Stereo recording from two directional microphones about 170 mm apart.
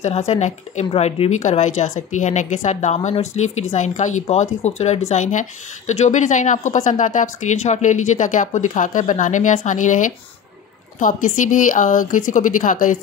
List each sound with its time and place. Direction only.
0.0 s speech: 40° left (ahead or behind)